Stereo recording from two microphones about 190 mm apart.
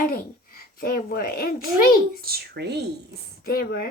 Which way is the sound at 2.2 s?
55° right (ahead or behind).